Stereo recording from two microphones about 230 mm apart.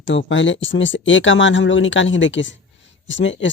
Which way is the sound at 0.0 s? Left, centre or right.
Left.